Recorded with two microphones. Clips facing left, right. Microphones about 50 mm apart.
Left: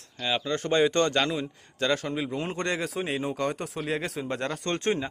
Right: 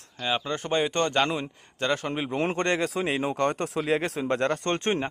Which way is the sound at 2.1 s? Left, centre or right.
Right.